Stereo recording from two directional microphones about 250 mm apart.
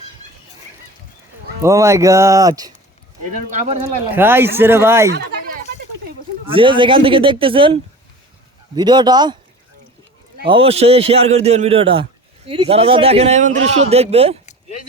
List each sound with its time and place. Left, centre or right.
1.6 s speech: centre
3.5 s a man's voice: right
4.1 s speech: centre
6.4 s a man's voice: right
10.4 s a man's voice: right